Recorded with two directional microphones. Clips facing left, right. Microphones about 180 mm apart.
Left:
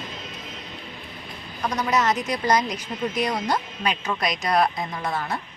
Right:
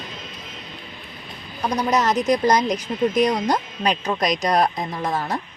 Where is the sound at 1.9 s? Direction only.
35° right (ahead or behind).